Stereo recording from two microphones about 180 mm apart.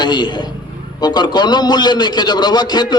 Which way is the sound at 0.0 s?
25° left (ahead or behind).